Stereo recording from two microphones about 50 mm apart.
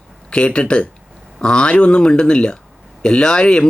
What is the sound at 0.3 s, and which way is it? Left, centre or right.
Speech, left.